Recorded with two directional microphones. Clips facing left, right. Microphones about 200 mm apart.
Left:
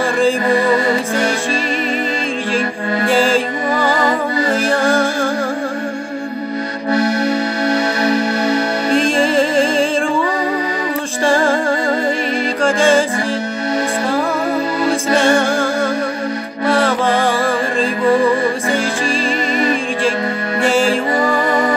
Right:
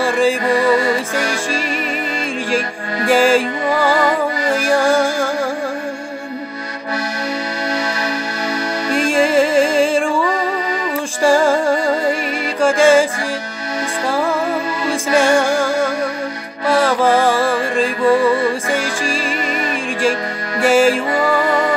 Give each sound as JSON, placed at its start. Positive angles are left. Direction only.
{"t": 3.1, "sound": "music", "side_deg": -10}
{"t": 4.6, "sound": "music", "side_deg": -10}
{"t": 8.0, "sound": "music", "side_deg": 25}
{"t": 8.9, "sound": "music", "side_deg": -10}
{"t": 11.2, "sound": "music", "side_deg": -10}
{"t": 15.1, "sound": "music", "side_deg": -10}
{"t": 20.6, "sound": "music", "side_deg": -10}